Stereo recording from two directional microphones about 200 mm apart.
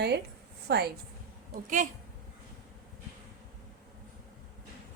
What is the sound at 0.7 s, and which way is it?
Speech, 55° right (ahead or behind).